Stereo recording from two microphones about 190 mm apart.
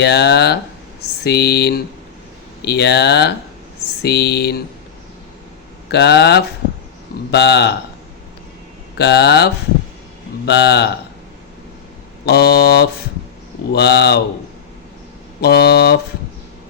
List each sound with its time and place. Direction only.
0.0 s speech: 60° left (ahead or behind)
5.9 s speech: 60° left (ahead or behind)
9.0 s speech: 60° left (ahead or behind)
12.2 s speech: 55° left (ahead or behind)
15.4 s speech: 55° left (ahead or behind)